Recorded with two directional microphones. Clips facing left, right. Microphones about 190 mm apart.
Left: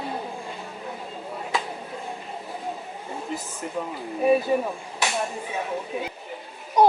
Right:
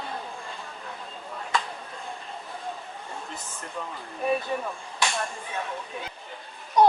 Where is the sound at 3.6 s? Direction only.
15° left (ahead or behind).